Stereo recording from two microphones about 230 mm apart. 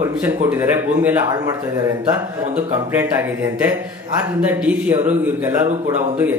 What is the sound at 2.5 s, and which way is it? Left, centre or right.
A man's voice, centre.